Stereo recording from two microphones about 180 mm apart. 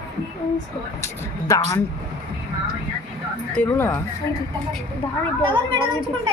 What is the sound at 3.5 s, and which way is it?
Speech, 10° left (ahead or behind).